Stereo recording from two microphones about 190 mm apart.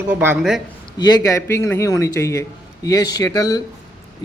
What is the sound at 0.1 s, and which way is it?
Speech, 10° right (ahead or behind).